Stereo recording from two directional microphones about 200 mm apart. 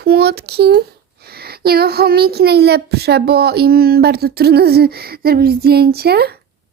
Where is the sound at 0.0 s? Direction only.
50° right (ahead or behind).